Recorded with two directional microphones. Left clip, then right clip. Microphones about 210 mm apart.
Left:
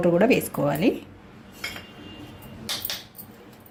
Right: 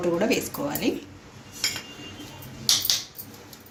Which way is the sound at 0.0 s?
50° left (ahead or behind).